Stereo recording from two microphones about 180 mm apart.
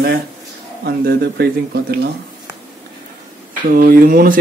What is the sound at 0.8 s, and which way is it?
Speech, 60° right (ahead or behind).